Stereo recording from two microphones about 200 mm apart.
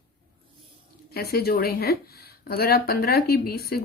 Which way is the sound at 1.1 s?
50° left (ahead or behind).